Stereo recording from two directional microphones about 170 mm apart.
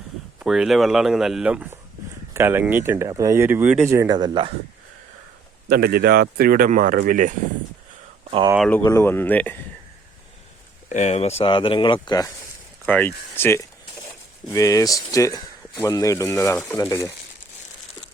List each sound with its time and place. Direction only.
0.3 s speech: 5° right (ahead or behind); by 4.5 s 25° right (ahead or behind)
5.6 s speech: 65° right (ahead or behind)
8.5 s speech: 5° left (ahead or behind)
8.8 s speech: 15° left (ahead or behind)
10.8 s speech: 45° left (ahead or behind); by 12.3 s 25° left (ahead or behind)
12.8 s speech: 10° left (ahead or behind)